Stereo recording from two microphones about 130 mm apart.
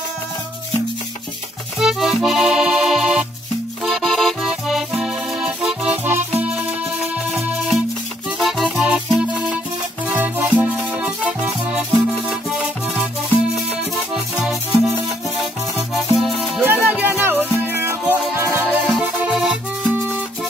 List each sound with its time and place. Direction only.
1.8 s accordion: 5° right (ahead or behind)
8.4 s music: centre (ahead or behind)
10.0 s music: 15° right (ahead or behind)
14.1 s music: centre (ahead or behind)
15.9 s music: centre (ahead or behind)
16.6 s music: 15° right (ahead or behind)
18.7 s music: 5° right (ahead or behind)